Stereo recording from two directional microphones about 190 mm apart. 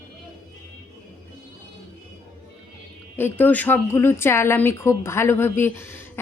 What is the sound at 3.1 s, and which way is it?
A woman's voice, 10° left (ahead or behind).